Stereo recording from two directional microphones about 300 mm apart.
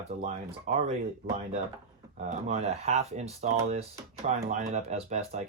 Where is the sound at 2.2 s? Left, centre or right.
Right.